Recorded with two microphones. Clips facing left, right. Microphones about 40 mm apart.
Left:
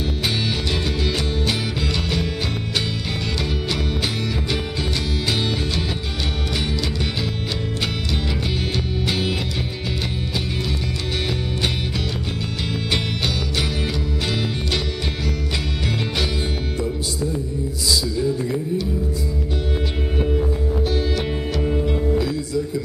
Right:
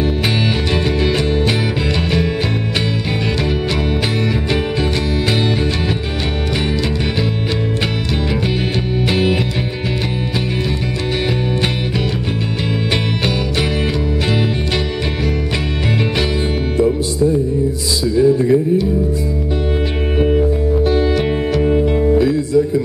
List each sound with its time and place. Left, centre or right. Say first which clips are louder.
1.0 s music: right 7 dB; right
9.1 s music: right 8 dB; right
18.0 s music: right 10 dB; right
20.8 s music: right 9 dB; right